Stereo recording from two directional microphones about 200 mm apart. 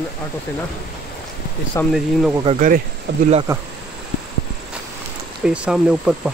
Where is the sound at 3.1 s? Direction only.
60° right (ahead or behind).